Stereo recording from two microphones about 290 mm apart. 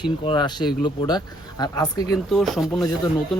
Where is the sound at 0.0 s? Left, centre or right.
Centre.